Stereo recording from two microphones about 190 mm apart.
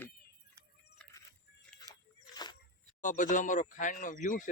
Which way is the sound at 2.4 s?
20° left (ahead or behind).